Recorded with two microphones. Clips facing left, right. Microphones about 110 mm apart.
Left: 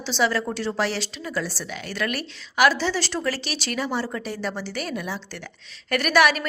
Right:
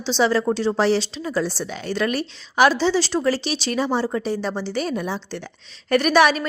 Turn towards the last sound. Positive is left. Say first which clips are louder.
# right 3 dB
turn(degrees=-25)  # may be behind; listen again after turning